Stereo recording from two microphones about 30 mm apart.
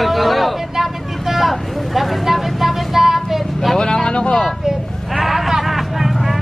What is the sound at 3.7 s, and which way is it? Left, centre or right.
Speech, left.